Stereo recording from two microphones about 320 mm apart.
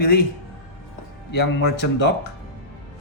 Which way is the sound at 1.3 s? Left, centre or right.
Left.